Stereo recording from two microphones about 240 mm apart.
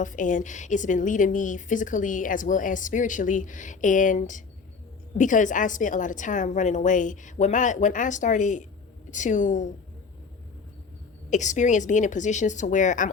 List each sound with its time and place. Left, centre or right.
0.0 s a woman's voice: left
11.3 s a woman's voice: left